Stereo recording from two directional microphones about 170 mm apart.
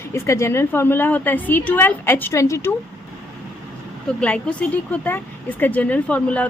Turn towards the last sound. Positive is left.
turn(degrees=10)  # may be behind; listen again after turning